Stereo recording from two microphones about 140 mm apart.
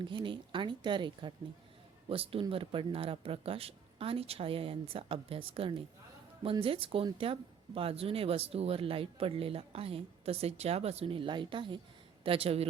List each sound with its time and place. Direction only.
0.0 s speech: 35° right (ahead or behind)